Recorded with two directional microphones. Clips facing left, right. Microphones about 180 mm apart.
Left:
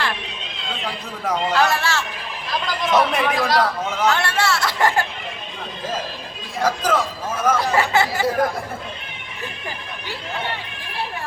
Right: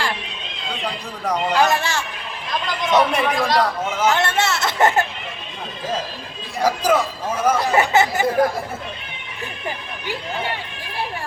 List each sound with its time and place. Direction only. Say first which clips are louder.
1.2 s a man's voice: right 1 dB; centre (ahead or behind)
1.5 s speech: right 2 dB; 20° right (ahead or behind)
2.8 s a man's voice: right 1 dB; centre (ahead or behind)
4.0 s speech: right 1 dB; 20° right (ahead or behind)
6.6 s speech: right 2 dB; 10° right (ahead or behind)